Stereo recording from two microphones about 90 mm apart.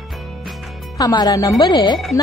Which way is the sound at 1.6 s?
55° left (ahead or behind).